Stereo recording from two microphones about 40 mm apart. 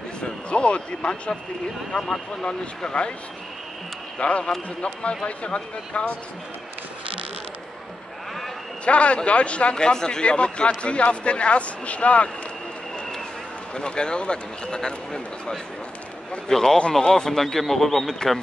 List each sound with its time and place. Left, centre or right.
0.2 s a man's voice: left
4.2 s a man's voice: left
8.8 s a man's voice: left
13.7 s a man's voice: left